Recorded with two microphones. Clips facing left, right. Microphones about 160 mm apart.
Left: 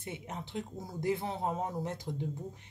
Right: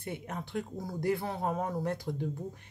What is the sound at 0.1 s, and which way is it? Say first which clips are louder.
Speech: right 3 dB; 20° left (ahead or behind).